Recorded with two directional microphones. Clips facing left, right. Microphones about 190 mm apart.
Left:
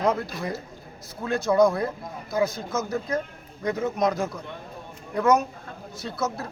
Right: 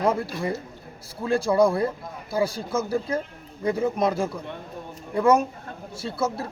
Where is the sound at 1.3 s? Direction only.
30° right (ahead or behind).